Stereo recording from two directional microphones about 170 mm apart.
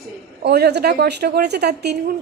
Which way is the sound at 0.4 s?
75° right (ahead or behind).